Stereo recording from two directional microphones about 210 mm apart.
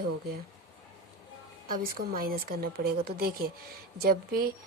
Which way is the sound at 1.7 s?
45° right (ahead or behind).